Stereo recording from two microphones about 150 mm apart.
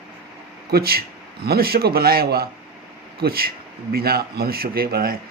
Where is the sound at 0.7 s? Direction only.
90° right.